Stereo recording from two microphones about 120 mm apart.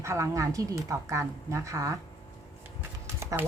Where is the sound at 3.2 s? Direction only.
20° right (ahead or behind).